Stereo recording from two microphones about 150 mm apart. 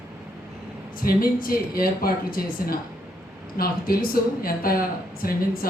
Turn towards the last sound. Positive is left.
turn(degrees=75)  # may be behind; listen again after turning